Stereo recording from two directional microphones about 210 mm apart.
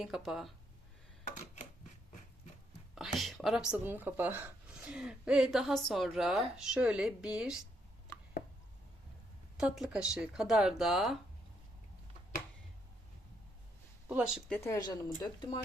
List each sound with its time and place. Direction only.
0.0 s speech: centre (ahead or behind)
2.9 s speech: centre (ahead or behind)
9.6 s speech: 5° right (ahead or behind)
14.1 s speech: 5° right (ahead or behind)
14.5 s speech: 15° left (ahead or behind)